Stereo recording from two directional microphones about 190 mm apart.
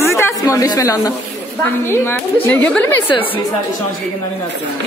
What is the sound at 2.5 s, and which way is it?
Speech, 5° left (ahead or behind).